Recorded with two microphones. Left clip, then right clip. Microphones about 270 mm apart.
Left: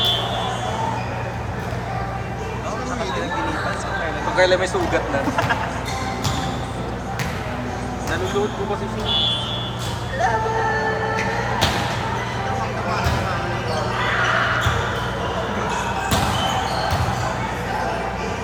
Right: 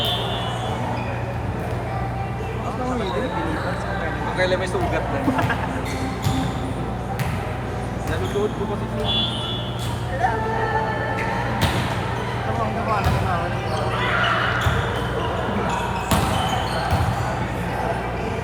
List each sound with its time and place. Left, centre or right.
4.4 s speech: left